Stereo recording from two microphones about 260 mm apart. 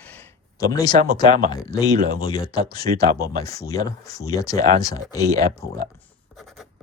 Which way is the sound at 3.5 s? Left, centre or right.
Centre.